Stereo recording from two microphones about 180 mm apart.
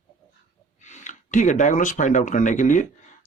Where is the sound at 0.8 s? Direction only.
40° left (ahead or behind).